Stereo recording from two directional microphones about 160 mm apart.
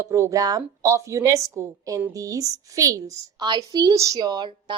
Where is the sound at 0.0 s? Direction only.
20° right (ahead or behind).